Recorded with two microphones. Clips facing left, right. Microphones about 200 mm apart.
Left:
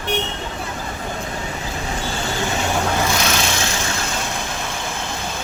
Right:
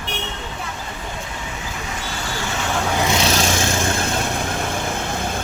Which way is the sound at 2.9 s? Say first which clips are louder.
Right 1 dB; 20° right (ahead or behind).